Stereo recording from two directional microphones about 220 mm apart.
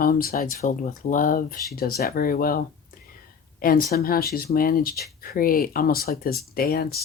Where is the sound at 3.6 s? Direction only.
45° left (ahead or behind).